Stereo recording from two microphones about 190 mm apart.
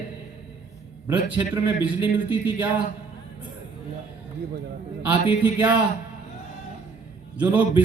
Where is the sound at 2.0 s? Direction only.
25° left (ahead or behind).